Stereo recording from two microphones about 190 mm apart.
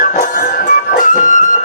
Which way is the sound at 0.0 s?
45° left (ahead or behind).